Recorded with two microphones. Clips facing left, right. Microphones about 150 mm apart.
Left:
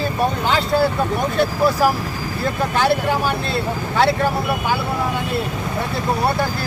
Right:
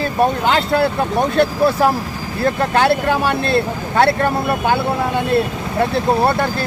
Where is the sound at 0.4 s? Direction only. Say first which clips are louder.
Right 2 dB; 60° right (ahead or behind).